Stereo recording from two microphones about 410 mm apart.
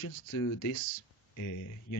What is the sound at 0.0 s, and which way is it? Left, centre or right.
Speech, left.